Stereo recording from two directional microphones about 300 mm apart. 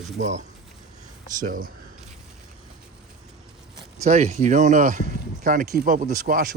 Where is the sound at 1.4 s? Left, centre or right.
Right.